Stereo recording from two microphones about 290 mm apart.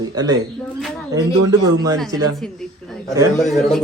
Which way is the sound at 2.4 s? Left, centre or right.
Centre.